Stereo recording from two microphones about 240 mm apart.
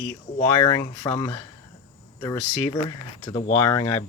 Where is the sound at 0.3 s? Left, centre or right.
Centre.